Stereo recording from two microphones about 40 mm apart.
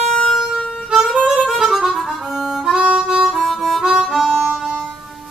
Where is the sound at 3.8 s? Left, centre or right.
Centre.